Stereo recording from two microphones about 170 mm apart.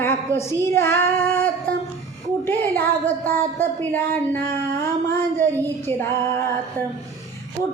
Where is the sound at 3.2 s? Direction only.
10° left (ahead or behind).